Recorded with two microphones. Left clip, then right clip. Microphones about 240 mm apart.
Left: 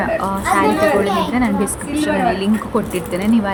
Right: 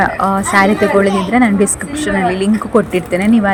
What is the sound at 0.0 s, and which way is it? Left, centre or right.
A woman's voice, right.